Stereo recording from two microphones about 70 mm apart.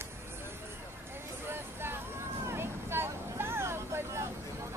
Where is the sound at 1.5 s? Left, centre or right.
Right.